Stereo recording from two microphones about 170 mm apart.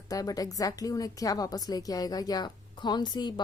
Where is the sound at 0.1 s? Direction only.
20° left (ahead or behind).